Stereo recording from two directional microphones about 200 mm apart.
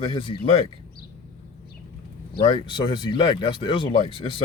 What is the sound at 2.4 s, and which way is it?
Speech, 25° left (ahead or behind).